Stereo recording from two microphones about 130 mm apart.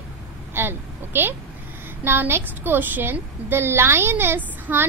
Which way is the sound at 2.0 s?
20° right (ahead or behind).